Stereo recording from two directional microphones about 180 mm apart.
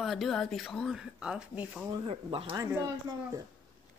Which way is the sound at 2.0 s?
30° right (ahead or behind).